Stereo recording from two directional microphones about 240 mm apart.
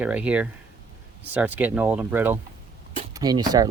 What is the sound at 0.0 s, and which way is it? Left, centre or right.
Speech, centre.